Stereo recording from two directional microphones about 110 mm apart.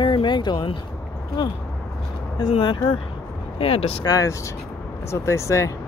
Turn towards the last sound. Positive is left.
turn(degrees=25)  # may be behind; listen again after turning